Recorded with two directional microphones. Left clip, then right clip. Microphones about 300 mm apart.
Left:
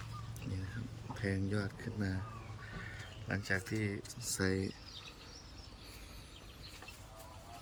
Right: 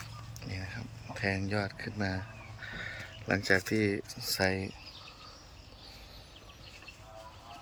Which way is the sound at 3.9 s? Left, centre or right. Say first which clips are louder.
Right 8 dB; centre.